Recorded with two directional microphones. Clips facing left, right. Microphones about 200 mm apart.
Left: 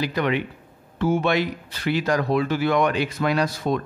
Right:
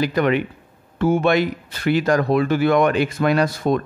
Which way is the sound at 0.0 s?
50° right (ahead or behind).